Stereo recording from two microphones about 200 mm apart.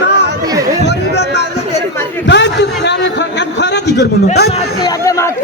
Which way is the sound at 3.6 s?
55° left (ahead or behind).